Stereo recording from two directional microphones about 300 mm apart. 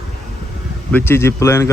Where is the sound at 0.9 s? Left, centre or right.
Centre.